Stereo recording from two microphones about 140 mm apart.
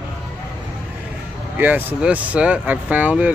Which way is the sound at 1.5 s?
10° right (ahead or behind).